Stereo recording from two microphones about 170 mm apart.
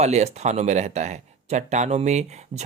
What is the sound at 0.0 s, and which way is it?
Speech, 40° right (ahead or behind).